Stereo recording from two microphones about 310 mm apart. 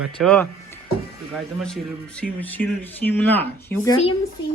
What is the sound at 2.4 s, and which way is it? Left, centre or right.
Speech, centre.